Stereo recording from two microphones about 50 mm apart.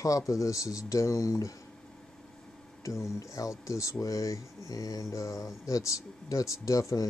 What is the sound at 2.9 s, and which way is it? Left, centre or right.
Speech, left.